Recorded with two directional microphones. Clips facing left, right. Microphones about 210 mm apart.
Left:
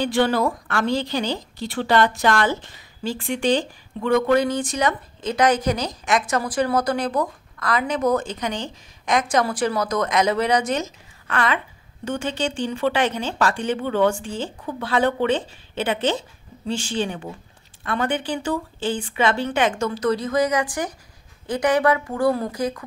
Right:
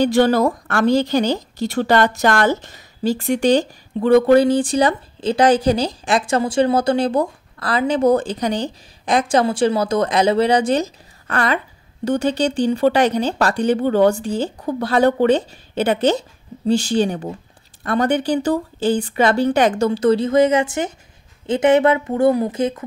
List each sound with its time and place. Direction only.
0.0 s a woman's voice: 40° right (ahead or behind); by 22.8 s 25° right (ahead or behind)